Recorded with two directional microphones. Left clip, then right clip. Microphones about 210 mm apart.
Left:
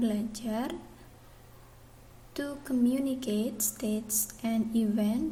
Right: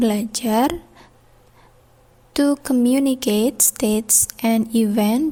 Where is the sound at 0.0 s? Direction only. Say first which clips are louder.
Right 12 dB; 50° right (ahead or behind).